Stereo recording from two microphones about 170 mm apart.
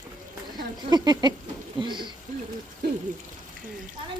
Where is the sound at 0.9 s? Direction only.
25° right (ahead or behind).